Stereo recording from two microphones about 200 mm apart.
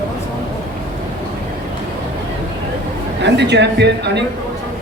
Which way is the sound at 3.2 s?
60° right (ahead or behind).